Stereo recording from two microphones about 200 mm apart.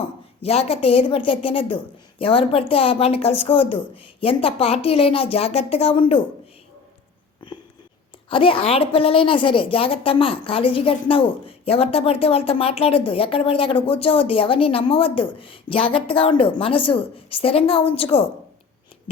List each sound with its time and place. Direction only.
0.0 s a woman's voice: 30° left (ahead or behind)
8.3 s a woman's voice: 25° left (ahead or behind)